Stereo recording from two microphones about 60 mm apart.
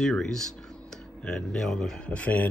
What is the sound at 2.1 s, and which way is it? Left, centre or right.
Speech, left.